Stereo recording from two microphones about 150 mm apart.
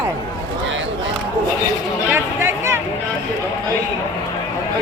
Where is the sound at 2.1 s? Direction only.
15° right (ahead or behind).